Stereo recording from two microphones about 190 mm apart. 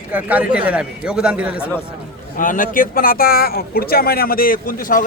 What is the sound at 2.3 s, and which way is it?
Speech, 45° left (ahead or behind).